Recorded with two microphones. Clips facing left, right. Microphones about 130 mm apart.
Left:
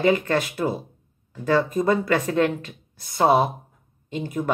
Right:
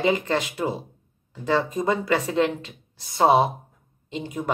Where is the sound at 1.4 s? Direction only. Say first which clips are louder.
Left 2 dB; 15° right (ahead or behind).